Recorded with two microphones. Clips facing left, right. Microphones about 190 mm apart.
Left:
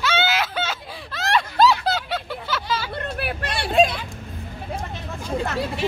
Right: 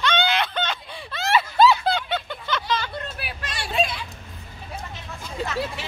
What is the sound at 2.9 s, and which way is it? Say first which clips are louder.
Hubbub: left 6 dB; 60° left (ahead or behind).